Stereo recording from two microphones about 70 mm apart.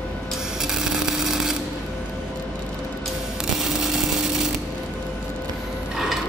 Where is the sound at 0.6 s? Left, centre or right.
Centre.